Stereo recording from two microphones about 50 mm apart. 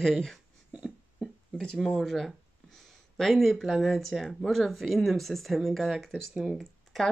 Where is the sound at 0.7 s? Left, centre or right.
Right.